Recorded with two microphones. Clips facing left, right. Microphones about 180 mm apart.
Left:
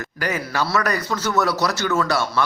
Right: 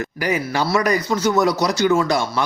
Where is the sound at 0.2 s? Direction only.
15° right (ahead or behind).